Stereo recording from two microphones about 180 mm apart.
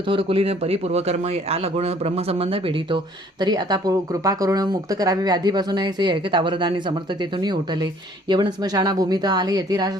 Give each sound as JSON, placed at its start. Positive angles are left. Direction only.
{"t": 0.1, "sound": "a man's voice", "side_deg": -30}